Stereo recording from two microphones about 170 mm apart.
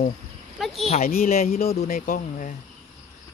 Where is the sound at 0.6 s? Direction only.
Centre (ahead or behind).